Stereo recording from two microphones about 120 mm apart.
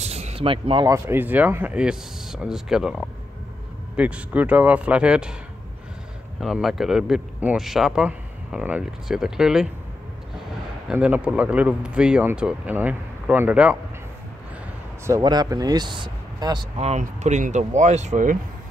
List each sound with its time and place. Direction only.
0.0 s a sound: 60° right (ahead or behind)
0.8 s speech: 20° right (ahead or behind)
6.4 s a man's voice: centre (ahead or behind)
10.9 s speech: 10° right (ahead or behind)
15.0 s speech: 30° right (ahead or behind)
16.7 s speech: 65° right (ahead or behind); by 18.4 s 90° right